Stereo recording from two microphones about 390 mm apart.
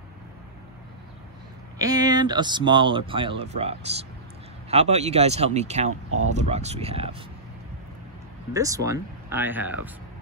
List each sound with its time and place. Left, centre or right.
1.8 s speech: centre
5.9 s speech: right
6.2 s speech: centre
8.5 s speech: centre